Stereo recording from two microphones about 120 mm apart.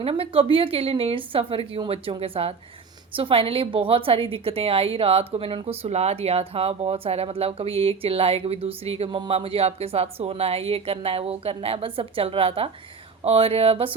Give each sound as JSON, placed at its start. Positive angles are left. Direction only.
{"t": 0.0, "sound": "a woman's voice", "side_deg": -50}